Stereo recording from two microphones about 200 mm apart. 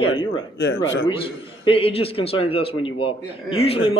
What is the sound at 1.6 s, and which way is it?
A man's voice, 30° left (ahead or behind).